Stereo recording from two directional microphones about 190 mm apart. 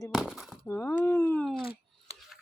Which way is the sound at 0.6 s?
15° left (ahead or behind).